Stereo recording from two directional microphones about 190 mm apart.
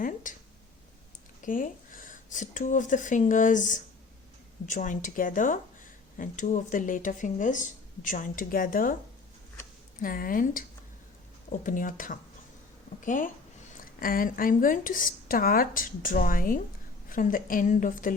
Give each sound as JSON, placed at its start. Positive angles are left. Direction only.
{"t": 0.0, "sound": "a sound", "side_deg": 45}
{"t": 1.5, "sound": "speech", "side_deg": 45}
{"t": 10.0, "sound": "speech", "side_deg": 50}